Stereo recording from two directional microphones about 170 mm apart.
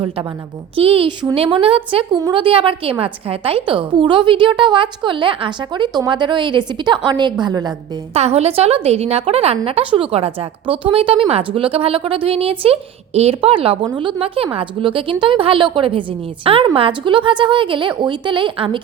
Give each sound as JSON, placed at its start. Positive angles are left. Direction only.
{"t": 0.8, "sound": "a woman's voice", "side_deg": -35}
{"t": 8.1, "sound": "a woman's voice", "side_deg": -40}